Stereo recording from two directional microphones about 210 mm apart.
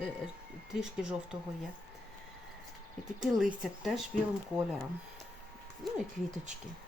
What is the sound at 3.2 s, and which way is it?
Speech, centre (ahead or behind).